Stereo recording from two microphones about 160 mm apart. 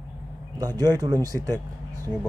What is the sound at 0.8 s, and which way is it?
Speech, 25° right (ahead or behind).